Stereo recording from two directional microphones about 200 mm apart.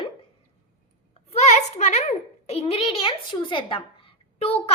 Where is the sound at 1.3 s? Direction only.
35° left (ahead or behind).